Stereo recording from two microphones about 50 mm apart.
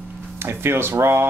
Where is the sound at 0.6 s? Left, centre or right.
Right.